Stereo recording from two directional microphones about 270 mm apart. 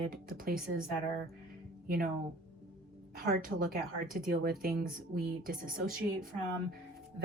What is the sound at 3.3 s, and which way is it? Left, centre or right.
Speech, right.